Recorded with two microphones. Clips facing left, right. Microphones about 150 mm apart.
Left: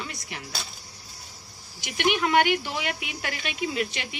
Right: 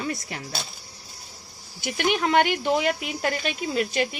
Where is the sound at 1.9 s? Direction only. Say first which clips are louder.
Right 1 dB; 40° right (ahead or behind).